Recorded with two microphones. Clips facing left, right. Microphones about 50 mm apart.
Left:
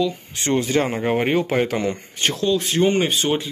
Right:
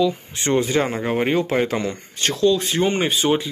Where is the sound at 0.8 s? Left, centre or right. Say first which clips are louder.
Left 1 dB; centre.